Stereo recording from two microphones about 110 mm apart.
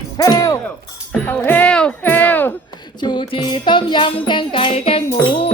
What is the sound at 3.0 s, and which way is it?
Music, 45° left (ahead or behind).